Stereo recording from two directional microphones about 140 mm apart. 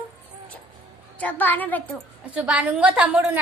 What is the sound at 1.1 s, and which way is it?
Speech, 10° left (ahead or behind).